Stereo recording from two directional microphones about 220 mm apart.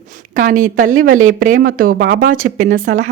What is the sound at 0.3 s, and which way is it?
Speech, 35° right (ahead or behind).